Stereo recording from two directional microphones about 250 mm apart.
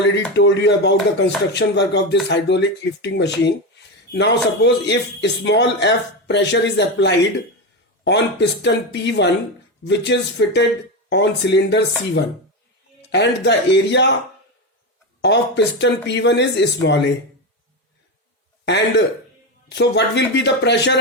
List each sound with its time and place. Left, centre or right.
0.3 s speech: left
15.2 s speech: left
18.6 s a man's voice: left